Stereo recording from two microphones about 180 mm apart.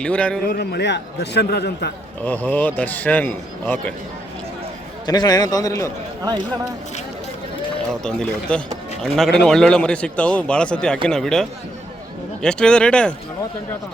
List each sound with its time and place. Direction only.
0.0 s a man's voice: 5° left (ahead or behind)
0.4 s a man's voice: 60° left (ahead or behind)
2.2 s a man's voice: 10° left (ahead or behind)
5.0 s a man's voice: 20° left (ahead or behind)
8.0 s a man's voice: 5° left (ahead or behind)